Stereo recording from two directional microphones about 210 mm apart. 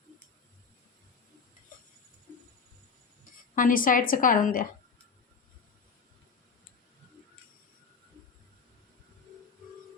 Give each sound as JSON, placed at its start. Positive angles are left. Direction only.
{"t": 3.5, "sound": "a woman's voice", "side_deg": 40}